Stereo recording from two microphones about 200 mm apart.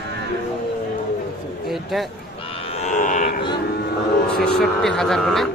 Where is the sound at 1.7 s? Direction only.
Centre (ahead or behind).